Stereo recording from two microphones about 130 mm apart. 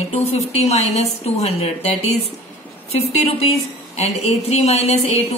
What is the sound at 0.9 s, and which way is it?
Speech, 50° left (ahead or behind).